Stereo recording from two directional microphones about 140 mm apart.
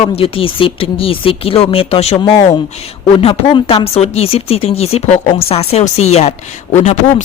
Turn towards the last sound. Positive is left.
turn(degrees=60)  # may be behind; listen again after turning